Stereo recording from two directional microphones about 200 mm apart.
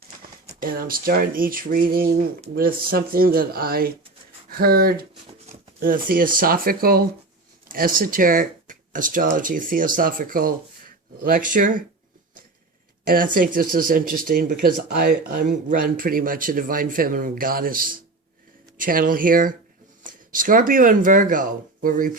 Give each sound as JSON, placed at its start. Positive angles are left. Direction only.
{"t": 0.6, "sound": "speech", "side_deg": -45}
{"t": 13.1, "sound": "speech", "side_deg": -45}